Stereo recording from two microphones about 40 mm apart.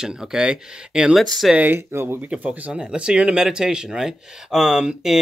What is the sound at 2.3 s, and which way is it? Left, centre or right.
Speech, right.